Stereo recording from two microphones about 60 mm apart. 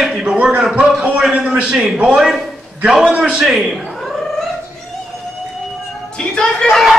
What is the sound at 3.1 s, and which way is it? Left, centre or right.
Speech, centre.